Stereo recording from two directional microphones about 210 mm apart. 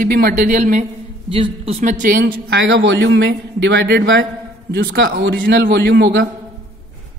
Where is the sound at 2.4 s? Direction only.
65° right (ahead or behind).